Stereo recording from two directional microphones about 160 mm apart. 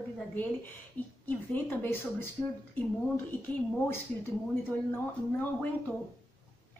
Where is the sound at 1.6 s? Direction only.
15° left (ahead or behind).